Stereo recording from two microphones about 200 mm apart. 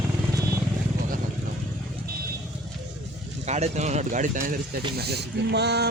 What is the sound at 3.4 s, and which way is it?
Speech, 35° right (ahead or behind).